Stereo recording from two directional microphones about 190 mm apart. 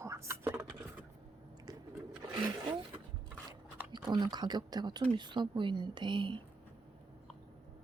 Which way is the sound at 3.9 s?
25° right (ahead or behind).